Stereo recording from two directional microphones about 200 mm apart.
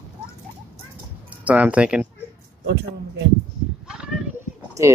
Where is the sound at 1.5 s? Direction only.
5° right (ahead or behind).